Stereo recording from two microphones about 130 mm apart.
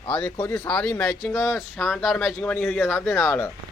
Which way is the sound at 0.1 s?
10° left (ahead or behind).